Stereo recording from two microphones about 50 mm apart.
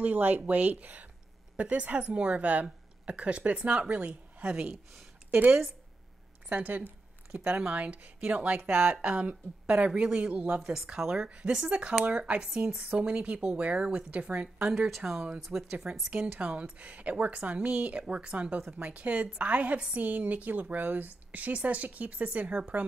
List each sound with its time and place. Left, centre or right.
0.0 s a woman's voice: right
10.6 s speech: centre
11.2 s speech: right
14.7 s speech: centre
16.3 s a woman's voice: right